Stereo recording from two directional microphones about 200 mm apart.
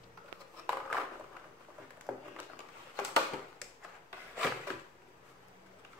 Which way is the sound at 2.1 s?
Centre (ahead or behind).